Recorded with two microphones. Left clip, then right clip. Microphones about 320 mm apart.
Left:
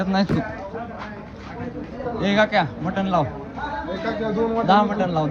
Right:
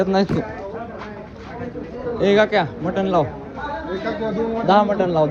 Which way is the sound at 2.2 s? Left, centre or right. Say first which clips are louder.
Right 3 dB; centre.